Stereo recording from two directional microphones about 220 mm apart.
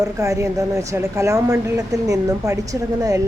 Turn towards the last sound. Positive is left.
turn(degrees=-15)  # may be behind; listen again after turning